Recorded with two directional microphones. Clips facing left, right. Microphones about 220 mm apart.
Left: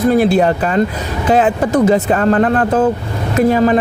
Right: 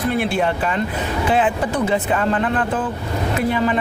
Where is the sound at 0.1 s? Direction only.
40° left (ahead or behind).